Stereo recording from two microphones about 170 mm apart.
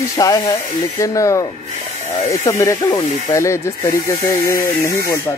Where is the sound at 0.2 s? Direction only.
20° left (ahead or behind).